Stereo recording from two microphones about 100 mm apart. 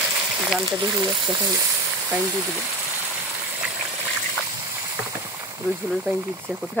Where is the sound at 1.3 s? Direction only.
35° right (ahead or behind).